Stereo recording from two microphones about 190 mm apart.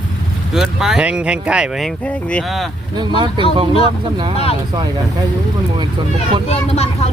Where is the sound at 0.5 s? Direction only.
Centre (ahead or behind).